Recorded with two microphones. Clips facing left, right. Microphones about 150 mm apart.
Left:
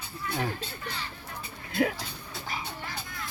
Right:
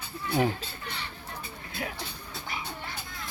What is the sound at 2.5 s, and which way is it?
Music, 40° left (ahead or behind).